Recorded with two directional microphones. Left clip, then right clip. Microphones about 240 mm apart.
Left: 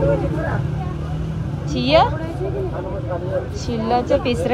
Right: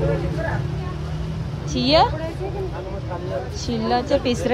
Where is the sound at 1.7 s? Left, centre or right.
Centre.